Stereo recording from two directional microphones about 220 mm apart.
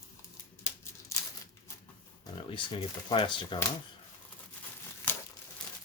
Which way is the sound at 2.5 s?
20° left (ahead or behind).